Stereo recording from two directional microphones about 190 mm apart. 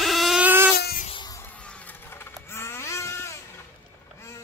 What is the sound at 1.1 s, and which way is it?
Music, 20° left (ahead or behind).